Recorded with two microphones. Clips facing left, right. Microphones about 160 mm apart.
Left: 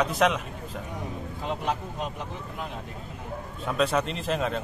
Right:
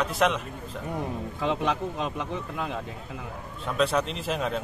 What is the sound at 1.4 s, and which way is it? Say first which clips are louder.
Speech: right 4 dB; 90° right.